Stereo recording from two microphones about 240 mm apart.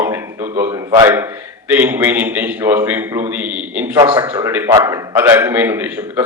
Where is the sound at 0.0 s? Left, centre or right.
Centre.